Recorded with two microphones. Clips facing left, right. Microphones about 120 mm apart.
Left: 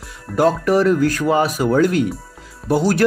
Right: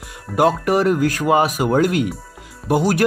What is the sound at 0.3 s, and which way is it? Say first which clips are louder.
Speech: left 1 dB; 15° right (ahead or behind).